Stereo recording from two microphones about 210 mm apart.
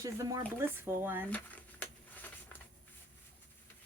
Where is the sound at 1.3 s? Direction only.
5° left (ahead or behind).